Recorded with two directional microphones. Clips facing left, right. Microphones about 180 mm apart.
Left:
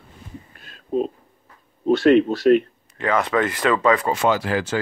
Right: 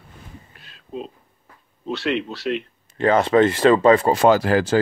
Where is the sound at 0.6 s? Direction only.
45° left (ahead or behind).